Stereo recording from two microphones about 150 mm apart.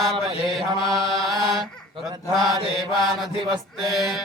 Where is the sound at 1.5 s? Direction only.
Centre (ahead or behind).